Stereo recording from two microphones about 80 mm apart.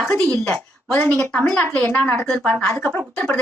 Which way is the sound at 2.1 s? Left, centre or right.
Centre.